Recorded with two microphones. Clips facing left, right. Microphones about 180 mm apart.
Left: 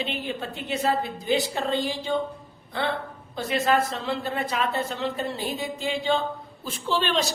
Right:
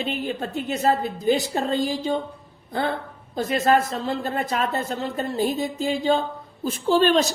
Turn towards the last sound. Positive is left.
turn(degrees=-45)  # may be behind; listen again after turning